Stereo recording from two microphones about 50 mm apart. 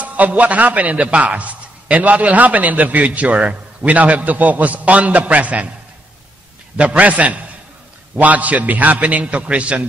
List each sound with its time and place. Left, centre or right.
0.0 s a man's voice: right
6.8 s a man's voice: right